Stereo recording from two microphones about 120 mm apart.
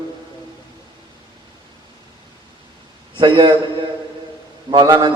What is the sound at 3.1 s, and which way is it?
Speech, 40° right (ahead or behind).